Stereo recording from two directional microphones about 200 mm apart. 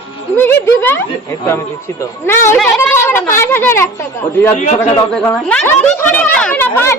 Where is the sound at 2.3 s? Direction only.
15° left (ahead or behind).